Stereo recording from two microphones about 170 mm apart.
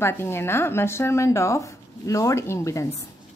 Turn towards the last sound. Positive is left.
turn(degrees=15)  # may be behind; listen again after turning